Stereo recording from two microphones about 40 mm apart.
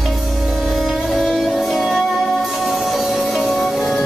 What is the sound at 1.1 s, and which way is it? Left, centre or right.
Music, centre.